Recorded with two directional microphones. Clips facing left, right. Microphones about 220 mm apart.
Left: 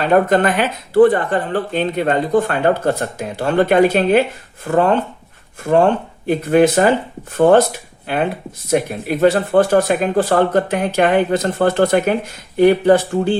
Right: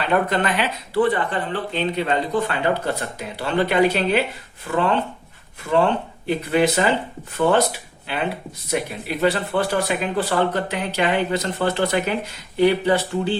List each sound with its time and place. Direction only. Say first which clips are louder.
0.0 s speech: left 7 dB; 45° left (ahead or behind)